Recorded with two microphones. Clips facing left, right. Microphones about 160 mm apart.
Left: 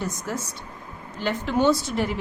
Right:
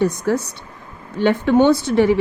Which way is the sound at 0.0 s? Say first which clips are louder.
Right 11 dB; 65° right (ahead or behind).